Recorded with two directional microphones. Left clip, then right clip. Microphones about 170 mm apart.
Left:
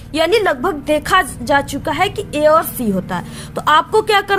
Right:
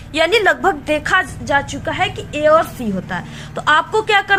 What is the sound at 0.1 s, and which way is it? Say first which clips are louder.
A woman's voice: right 1 dB; 25° left (ahead or behind).